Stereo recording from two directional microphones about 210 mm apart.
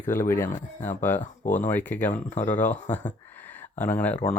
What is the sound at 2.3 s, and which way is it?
Speech, 35° left (ahead or behind).